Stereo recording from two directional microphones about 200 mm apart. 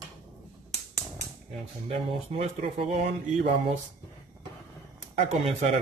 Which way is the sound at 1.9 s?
30° right (ahead or behind).